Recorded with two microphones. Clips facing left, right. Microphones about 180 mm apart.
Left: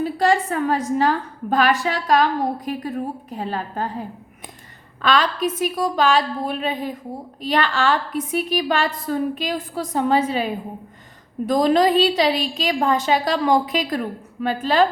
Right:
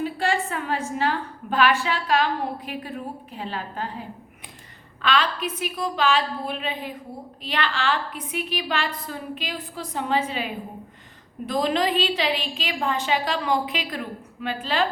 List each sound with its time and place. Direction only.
0.0 s a woman's voice: 40° left (ahead or behind)
5.0 s a woman's voice: 40° left (ahead or behind)